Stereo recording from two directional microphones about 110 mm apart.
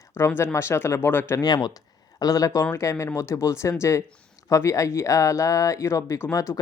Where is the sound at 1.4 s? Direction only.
40° left (ahead or behind).